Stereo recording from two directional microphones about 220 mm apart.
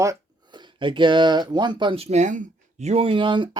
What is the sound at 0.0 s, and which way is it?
Speech, 15° right (ahead or behind).